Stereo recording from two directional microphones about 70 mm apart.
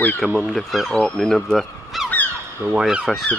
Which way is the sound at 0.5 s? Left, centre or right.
Centre.